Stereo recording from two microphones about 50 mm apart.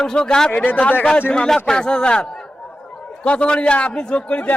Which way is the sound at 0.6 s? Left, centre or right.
Left.